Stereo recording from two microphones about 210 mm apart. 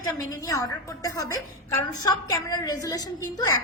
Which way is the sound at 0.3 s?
15° left (ahead or behind).